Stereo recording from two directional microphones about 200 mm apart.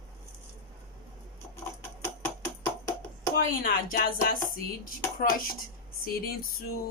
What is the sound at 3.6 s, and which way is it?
Speech, 45° left (ahead or behind).